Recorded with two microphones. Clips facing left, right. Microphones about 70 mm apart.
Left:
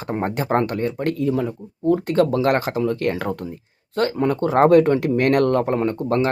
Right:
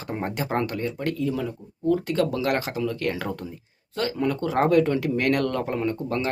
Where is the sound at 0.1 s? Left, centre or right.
Left.